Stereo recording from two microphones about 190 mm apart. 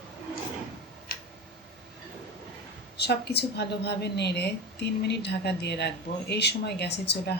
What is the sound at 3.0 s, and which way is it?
A woman's voice, 60° left (ahead or behind).